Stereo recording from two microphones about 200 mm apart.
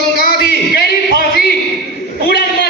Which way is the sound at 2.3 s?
50° left (ahead or behind).